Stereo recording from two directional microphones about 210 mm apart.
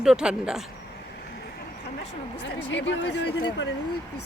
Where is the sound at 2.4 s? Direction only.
55° left (ahead or behind).